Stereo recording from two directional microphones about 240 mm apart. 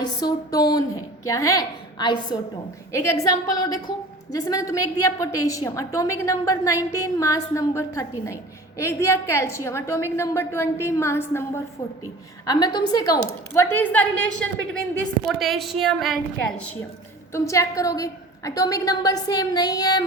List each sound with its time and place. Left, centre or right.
0.0 s a woman's voice: centre
17.3 s a woman's voice: centre